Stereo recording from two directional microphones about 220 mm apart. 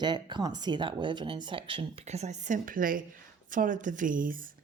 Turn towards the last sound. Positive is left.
turn(degrees=-40)  # may be behind; listen again after turning